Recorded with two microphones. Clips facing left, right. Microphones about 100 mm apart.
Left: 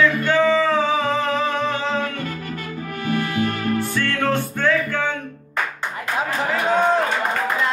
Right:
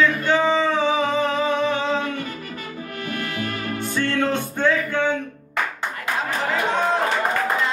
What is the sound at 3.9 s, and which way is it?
Music, 20° right (ahead or behind).